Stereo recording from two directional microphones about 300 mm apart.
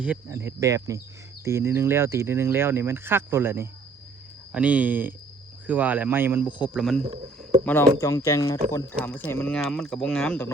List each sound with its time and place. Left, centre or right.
0.0 s speech: centre
7.0 s speech: centre
7.6 s speech: centre